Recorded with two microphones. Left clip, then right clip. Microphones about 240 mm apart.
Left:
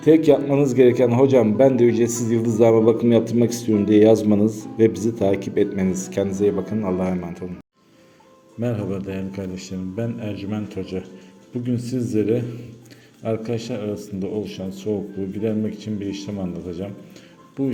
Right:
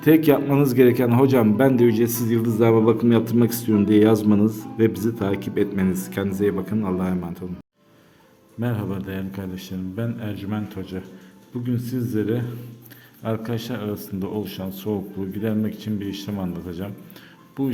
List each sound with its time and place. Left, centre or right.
0.0 s a man's voice: right
4.4 s a man's voice: right
4.8 s a man's voice: centre
8.6 s a man's voice: centre
11.8 s a man's voice: centre
13.2 s a man's voice: centre